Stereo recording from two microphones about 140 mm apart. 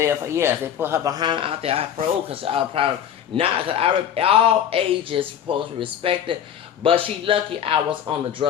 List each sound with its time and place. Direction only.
0.0 s a man's voice: 20° right (ahead or behind); by 8.4 s 35° right (ahead or behind)